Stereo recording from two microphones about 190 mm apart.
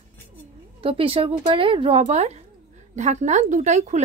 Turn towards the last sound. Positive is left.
turn(degrees=-40)  # may be behind; listen again after turning